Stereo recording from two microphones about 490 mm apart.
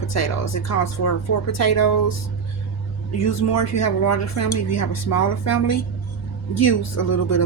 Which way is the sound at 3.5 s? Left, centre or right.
Left.